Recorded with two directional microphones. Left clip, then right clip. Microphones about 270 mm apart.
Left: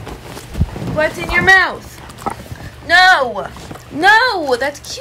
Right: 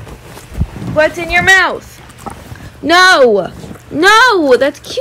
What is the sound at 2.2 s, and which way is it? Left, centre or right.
Pig, centre.